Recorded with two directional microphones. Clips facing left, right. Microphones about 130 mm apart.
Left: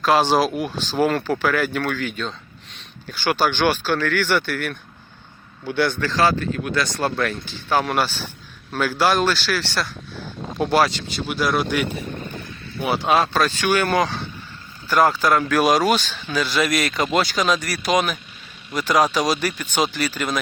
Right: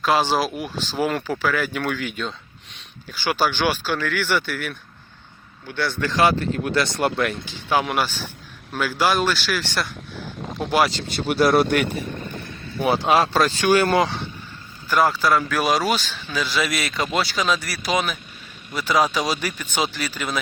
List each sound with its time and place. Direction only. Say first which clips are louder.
0.0 s speech: left 3 dB; 5° right (ahead or behind)
6.1 s speech: even; 20° right (ahead or behind); by 11.2 s 5° right (ahead or behind)
11.3 s speech: right 5 dB; 45° right (ahead or behind)
13.0 s speech: left 1 dB; 20° right (ahead or behind)
14.8 s speech: left 1 dB; centre (ahead or behind)
18.9 s speech: left 2 dB; 10° left (ahead or behind)
20.1 s speech: left 2 dB; 5° right (ahead or behind)